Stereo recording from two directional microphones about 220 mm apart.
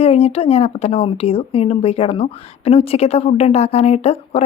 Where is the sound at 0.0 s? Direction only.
30° left (ahead or behind).